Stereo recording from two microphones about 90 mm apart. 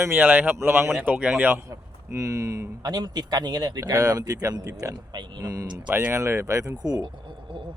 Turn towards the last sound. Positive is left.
turn(degrees=-45)  # may be behind; listen again after turning